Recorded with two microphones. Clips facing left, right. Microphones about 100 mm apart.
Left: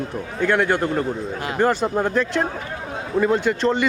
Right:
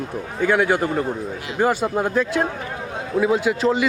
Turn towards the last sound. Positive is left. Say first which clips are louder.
# even
turn(degrees=-5)  # may be behind; listen again after turning